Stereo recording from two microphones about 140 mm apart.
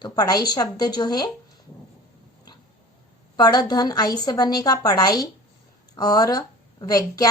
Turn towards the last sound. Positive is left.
turn(degrees=25)  # may be behind; listen again after turning